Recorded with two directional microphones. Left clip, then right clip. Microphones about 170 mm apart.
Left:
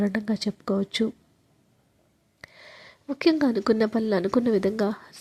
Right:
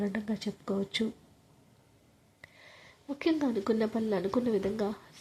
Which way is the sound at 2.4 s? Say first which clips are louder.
Left 7 dB; 30° left (ahead or behind).